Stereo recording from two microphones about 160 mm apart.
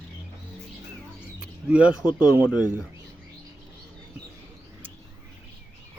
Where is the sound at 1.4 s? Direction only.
5° right (ahead or behind).